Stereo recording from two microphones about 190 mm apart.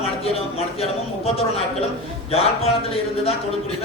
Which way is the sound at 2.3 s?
30° left (ahead or behind).